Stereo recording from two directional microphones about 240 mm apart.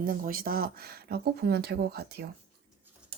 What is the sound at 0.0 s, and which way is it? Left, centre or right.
Speech, right.